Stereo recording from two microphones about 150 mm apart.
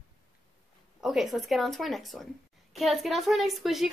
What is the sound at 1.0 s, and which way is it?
Speech, centre (ahead or behind).